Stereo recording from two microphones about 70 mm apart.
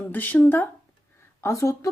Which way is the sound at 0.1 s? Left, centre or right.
Left.